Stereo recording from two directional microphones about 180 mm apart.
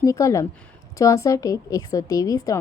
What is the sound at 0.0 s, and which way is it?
A woman's voice, 15° left (ahead or behind).